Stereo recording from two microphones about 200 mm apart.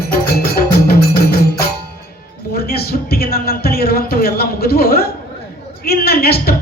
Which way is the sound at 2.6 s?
50° left (ahead or behind).